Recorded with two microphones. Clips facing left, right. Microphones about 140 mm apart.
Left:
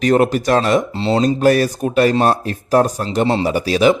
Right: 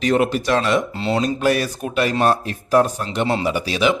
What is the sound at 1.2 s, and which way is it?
Speech, 45° left (ahead or behind).